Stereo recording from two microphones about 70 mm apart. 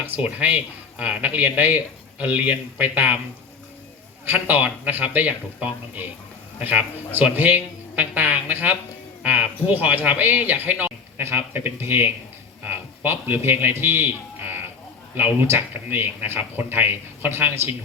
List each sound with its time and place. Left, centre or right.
0.2 s speech: centre
4.3 s a man's voice: right